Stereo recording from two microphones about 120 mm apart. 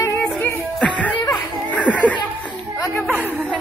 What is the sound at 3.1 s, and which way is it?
Chatter, 15° right (ahead or behind).